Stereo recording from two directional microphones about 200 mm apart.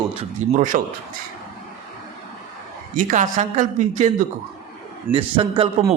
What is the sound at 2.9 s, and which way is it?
A man's voice, 40° right (ahead or behind).